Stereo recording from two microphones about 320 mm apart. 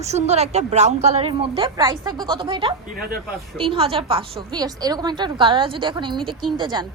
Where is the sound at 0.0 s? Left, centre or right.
Right.